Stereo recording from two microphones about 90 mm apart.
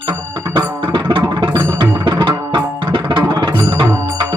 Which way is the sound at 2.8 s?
60° right (ahead or behind).